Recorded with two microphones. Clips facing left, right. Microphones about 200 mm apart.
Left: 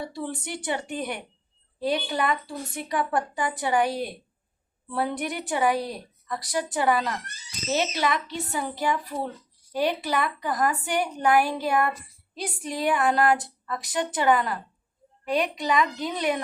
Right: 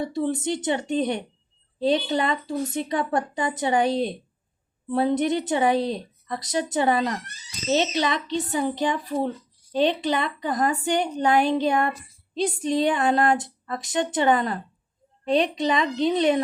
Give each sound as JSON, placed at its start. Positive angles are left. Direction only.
{"t": 0.0, "sound": "a woman's voice", "side_deg": -20}